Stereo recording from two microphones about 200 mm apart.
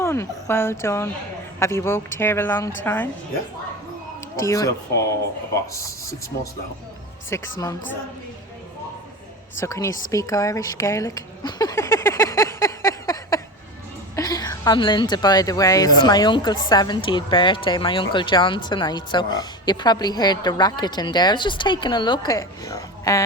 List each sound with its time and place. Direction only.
0.0 s speech: 15° left (ahead or behind)
4.4 s speech: 15° left (ahead or behind)
7.3 s a woman's voice: 15° left (ahead or behind)
9.6 s a woman's voice: 15° left (ahead or behind)